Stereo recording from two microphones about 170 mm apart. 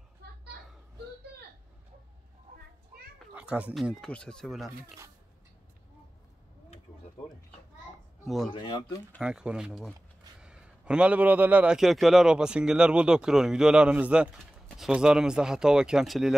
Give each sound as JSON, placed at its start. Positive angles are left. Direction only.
{"t": 3.3, "sound": "a man's voice", "side_deg": -10}
{"t": 8.5, "sound": "speech", "side_deg": 25}
{"t": 9.2, "sound": "a man's voice", "side_deg": -5}